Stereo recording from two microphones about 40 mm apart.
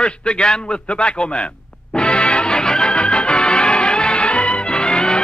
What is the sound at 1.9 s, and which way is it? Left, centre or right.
Music, left.